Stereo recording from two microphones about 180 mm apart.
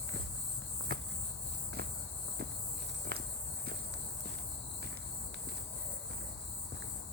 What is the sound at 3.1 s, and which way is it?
Walk, 60° right (ahead or behind).